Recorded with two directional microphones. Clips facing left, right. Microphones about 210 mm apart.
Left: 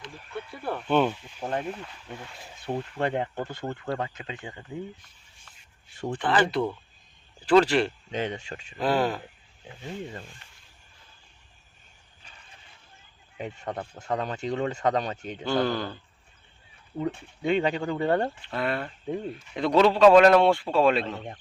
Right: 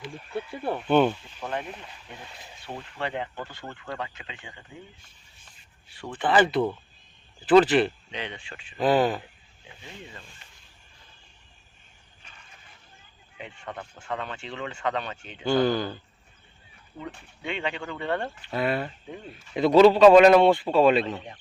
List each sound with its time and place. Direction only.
0.3 s speech: 25° right (ahead or behind)
0.8 s a man's voice: centre (ahead or behind)
1.4 s speech: 35° left (ahead or behind)
2.7 s speech: 40° left (ahead or behind)
5.9 s speech: 45° left (ahead or behind)
6.1 s a man's voice: 5° right (ahead or behind)
8.1 s speech: 45° left (ahead or behind)
8.8 s a man's voice: centre (ahead or behind)
9.8 s speech: 40° left (ahead or behind)
13.3 s speech: 40° left (ahead or behind)
15.4 s a man's voice: centre (ahead or behind)
17.4 s speech: 40° left (ahead or behind)
18.4 s a man's voice: 5° right (ahead or behind)